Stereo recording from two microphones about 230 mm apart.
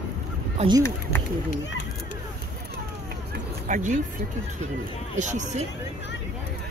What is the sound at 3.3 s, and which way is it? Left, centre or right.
Music, right.